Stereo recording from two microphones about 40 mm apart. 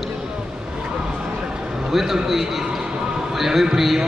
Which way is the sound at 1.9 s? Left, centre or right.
Centre.